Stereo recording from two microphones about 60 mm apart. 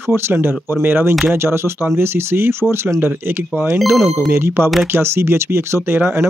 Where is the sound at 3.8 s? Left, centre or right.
Centre.